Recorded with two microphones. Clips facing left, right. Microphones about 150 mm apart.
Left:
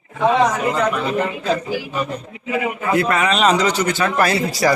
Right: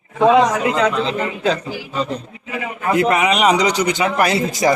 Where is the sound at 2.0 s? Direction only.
20° right (ahead or behind).